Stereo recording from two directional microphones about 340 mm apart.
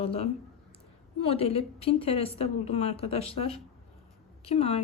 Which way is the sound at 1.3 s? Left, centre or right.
Centre.